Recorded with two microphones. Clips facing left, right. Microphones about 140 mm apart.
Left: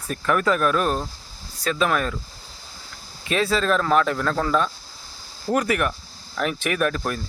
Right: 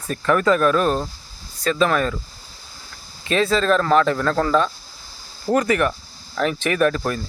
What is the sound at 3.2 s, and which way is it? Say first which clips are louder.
Speech: right 3 dB; 5° left (ahead or behind).